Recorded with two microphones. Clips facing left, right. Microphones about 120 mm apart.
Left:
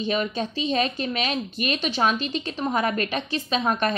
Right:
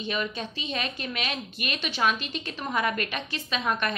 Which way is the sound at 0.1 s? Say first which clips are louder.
Left 4 dB; 35° left (ahead or behind).